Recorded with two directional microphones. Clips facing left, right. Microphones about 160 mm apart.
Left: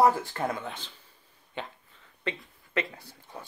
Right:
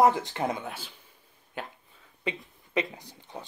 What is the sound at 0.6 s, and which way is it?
Speech, 10° right (ahead or behind).